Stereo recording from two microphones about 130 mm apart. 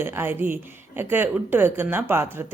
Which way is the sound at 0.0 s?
20° right (ahead or behind).